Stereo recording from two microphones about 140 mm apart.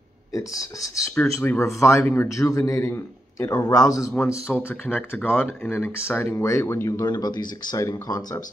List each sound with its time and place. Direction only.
0.3 s speech: 25° left (ahead or behind)